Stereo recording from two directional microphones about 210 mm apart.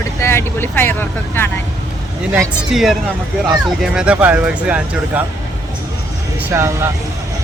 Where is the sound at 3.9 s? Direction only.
5° right (ahead or behind).